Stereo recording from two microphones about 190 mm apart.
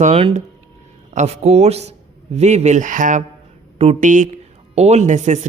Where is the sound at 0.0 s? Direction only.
30° right (ahead or behind).